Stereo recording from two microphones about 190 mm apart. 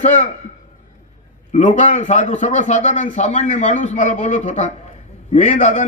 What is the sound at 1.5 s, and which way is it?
A man's voice, 40° left (ahead or behind).